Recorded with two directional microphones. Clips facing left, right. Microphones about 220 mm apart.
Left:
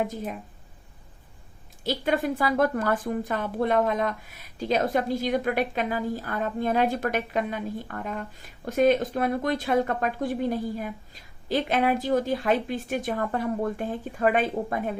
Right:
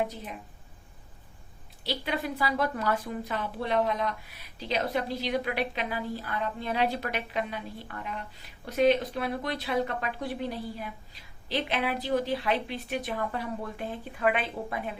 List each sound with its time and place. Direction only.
1.8 s a woman's voice: 45° left (ahead or behind)